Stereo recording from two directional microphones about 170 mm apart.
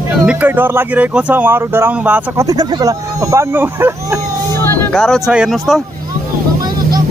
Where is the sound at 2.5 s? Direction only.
20° right (ahead or behind).